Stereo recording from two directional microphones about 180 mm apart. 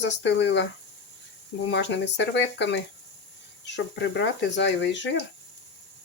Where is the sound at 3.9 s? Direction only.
75° left (ahead or behind).